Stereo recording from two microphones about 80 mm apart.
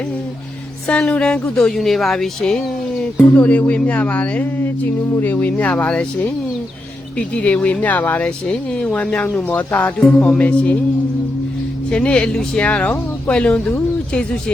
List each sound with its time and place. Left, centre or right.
0.9 s speech: centre
3.2 s speech: centre
11.9 s speech: centre